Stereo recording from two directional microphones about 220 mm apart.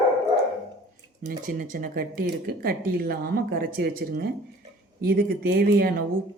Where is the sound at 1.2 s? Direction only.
40° right (ahead or behind).